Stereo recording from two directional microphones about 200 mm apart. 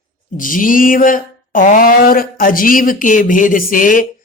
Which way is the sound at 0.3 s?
45° left (ahead or behind).